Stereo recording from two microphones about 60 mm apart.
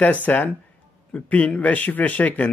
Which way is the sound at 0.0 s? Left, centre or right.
Left.